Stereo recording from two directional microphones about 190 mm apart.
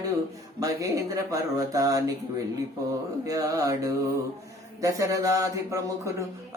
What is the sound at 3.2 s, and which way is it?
Speech, 20° right (ahead or behind).